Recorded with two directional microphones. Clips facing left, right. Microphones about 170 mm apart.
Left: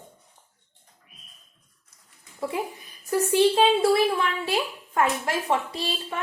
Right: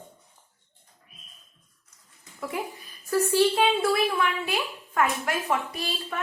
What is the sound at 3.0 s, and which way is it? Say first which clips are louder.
A woman's voice: left 2 dB; 20° left (ahead or behind).